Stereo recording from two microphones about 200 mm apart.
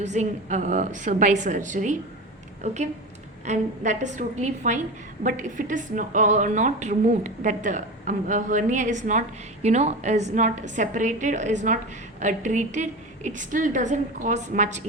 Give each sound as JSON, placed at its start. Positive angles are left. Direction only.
{"t": 0.0, "sound": "a woman's voice", "side_deg": -35}